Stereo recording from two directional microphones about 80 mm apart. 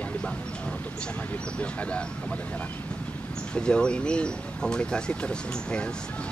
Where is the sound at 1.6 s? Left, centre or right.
Centre.